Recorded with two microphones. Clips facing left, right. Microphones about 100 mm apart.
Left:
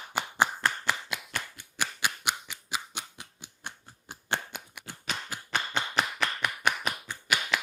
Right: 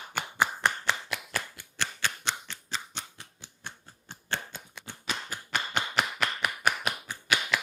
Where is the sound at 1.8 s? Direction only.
15° left (ahead or behind).